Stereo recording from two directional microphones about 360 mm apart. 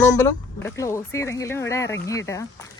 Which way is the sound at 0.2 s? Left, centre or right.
Centre.